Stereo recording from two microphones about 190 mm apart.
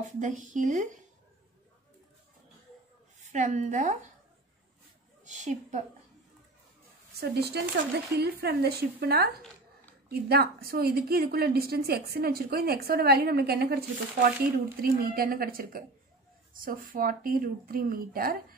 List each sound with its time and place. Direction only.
0.0 s a woman's voice: 40° right (ahead or behind)
3.3 s a woman's voice: 40° right (ahead or behind)
5.2 s a woman's voice: 40° right (ahead or behind)
7.2 s a woman's voice: 60° right (ahead or behind)